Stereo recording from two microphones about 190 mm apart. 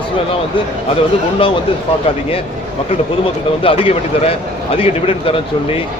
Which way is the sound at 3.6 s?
30° left (ahead or behind).